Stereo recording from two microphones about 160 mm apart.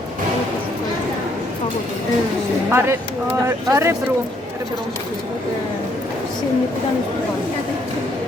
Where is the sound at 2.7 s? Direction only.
15° right (ahead or behind).